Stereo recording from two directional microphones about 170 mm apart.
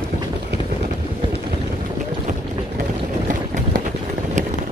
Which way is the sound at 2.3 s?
45° right (ahead or behind).